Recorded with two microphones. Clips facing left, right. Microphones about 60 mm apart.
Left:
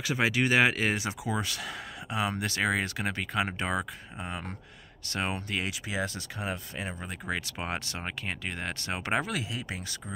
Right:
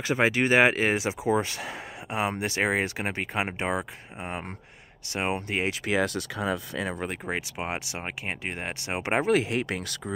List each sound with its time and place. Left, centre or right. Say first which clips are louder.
0.0 s speech: right 4 dB; right
5.9 s speech: right 7 dB; right
7.2 s speech: left 2 dB; right
9.6 s speech: right 8 dB; right